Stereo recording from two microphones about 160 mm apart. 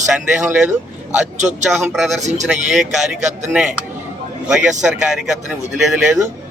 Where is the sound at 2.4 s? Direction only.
5° right (ahead or behind).